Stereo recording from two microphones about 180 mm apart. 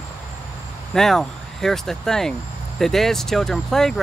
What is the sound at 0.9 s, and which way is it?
Speech, centre (ahead or behind).